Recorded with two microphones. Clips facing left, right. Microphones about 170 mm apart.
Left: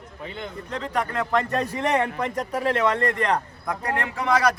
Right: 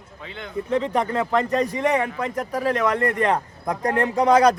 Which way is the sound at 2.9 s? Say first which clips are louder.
Right 2 dB; 15° right (ahead or behind).